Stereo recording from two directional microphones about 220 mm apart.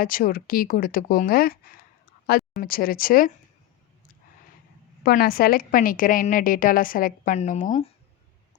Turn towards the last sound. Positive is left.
turn(degrees=35)  # may be behind; listen again after turning